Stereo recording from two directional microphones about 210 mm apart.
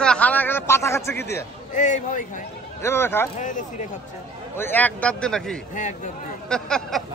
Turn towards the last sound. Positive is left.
turn(degrees=5)  # may be behind; listen again after turning